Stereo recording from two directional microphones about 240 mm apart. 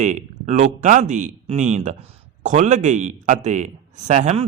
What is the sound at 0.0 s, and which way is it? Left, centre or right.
A man's voice, right.